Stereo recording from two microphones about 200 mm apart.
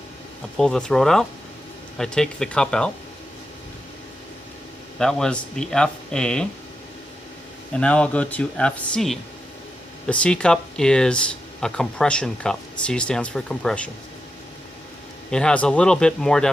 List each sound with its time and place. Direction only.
0.5 s speech: 5° left (ahead or behind)
4.9 s speech: centre (ahead or behind)
7.7 s speech: 5° left (ahead or behind)
15.3 s speech: 5° left (ahead or behind)